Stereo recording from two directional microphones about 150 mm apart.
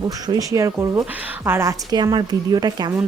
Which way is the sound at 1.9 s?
30° right (ahead or behind).